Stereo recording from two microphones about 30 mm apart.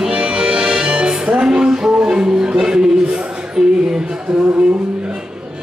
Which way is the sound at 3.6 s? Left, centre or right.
Centre.